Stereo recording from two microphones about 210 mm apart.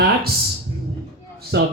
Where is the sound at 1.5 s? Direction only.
55° right (ahead or behind).